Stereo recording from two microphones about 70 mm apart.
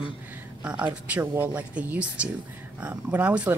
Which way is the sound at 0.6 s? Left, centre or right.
Centre.